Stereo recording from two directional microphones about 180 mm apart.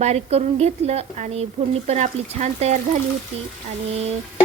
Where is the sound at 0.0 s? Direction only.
35° right (ahead or behind).